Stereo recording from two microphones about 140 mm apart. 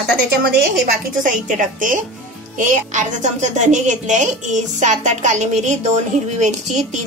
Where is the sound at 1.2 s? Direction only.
70° right (ahead or behind).